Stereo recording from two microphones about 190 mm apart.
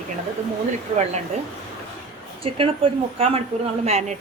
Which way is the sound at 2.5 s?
30° right (ahead or behind).